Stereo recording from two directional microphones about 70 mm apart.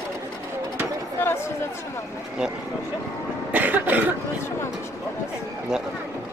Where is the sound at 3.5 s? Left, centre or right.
Right.